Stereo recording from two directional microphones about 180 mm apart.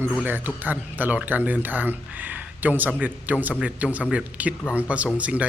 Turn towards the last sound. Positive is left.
turn(degrees=-5)  # may be behind; listen again after turning